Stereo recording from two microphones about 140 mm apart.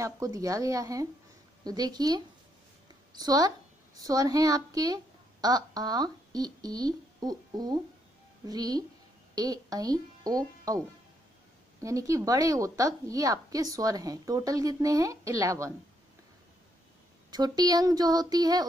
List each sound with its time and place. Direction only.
0.0 s a woman's voice: 25° right (ahead or behind)
11.8 s a woman's voice: 25° right (ahead or behind)
17.3 s a woman's voice: 30° right (ahead or behind)